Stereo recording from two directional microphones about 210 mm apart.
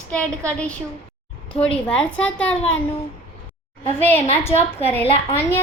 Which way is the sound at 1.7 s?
5° left (ahead or behind).